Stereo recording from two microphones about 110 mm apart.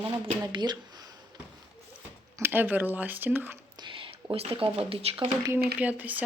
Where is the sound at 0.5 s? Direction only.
40° right (ahead or behind).